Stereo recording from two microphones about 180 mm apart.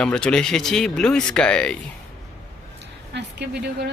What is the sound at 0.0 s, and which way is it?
Speech, 5° left (ahead or behind).